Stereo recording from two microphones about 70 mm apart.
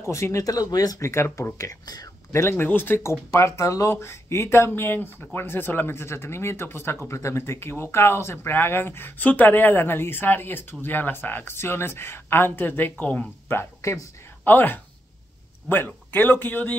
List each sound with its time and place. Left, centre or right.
0.0 s speech: left
2.5 s a man's voice: left
3.0 s a man's voice: left
13.5 s speech: left
14.4 s a man's voice: left